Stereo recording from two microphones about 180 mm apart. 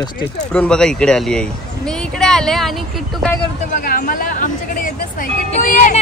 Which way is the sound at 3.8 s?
50° left (ahead or behind).